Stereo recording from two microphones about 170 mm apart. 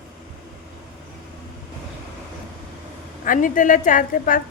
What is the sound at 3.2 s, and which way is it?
A woman's voice, 50° left (ahead or behind).